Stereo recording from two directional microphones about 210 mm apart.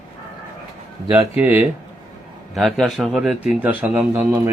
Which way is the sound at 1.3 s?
10° right (ahead or behind).